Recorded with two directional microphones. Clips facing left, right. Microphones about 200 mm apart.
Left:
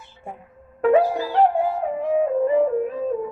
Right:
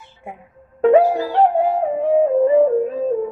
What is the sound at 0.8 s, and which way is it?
Music, 30° right (ahead or behind).